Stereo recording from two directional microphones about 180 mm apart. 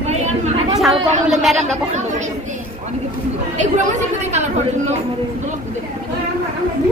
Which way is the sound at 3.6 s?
40° right (ahead or behind).